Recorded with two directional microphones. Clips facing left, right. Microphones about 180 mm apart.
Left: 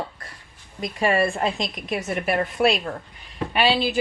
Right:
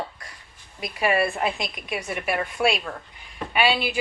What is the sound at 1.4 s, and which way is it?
Speech, centre (ahead or behind).